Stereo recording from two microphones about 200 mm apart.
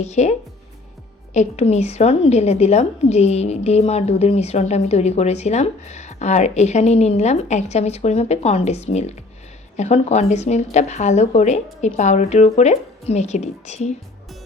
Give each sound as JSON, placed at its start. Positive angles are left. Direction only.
{"t": 0.0, "sound": "a woman's voice", "side_deg": 35}